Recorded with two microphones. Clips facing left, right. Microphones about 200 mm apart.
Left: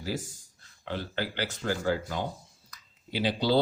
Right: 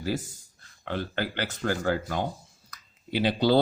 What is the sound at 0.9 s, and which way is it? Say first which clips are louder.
Speech: right 3 dB; 55° right (ahead or behind).